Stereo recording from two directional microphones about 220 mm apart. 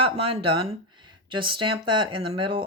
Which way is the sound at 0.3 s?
25° right (ahead or behind).